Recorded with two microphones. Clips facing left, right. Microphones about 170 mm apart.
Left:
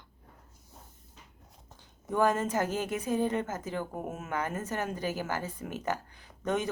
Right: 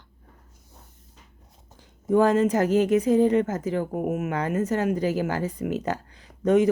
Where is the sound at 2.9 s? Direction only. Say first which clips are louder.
Right 10 dB; 80° right.